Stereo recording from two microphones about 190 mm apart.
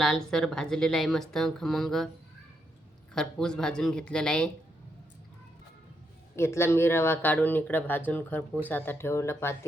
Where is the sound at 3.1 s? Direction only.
5° left (ahead or behind).